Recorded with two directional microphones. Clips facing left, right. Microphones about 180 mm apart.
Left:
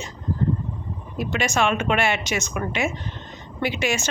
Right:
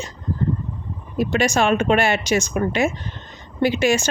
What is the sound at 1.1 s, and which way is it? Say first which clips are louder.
A woman's voice: right 5 dB; 35° right (ahead or behind).